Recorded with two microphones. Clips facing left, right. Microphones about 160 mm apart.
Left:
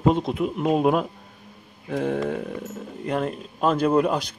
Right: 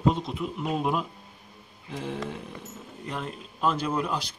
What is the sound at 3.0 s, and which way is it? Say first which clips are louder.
Speech: left 9 dB; 50° left (ahead or behind).